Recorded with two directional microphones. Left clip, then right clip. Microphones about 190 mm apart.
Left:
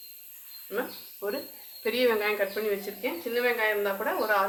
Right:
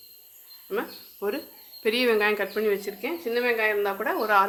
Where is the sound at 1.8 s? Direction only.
65° right (ahead or behind).